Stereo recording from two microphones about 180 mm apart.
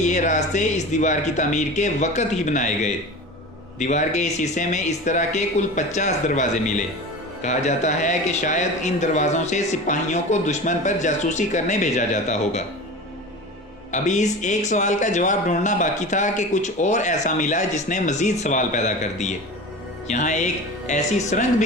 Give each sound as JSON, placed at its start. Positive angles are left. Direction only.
{"t": 0.0, "sound": "speech", "side_deg": 40}
{"t": 13.9, "sound": "speech", "side_deg": 40}